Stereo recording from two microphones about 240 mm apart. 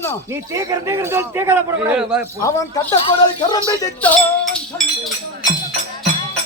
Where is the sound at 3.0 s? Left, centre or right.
Centre.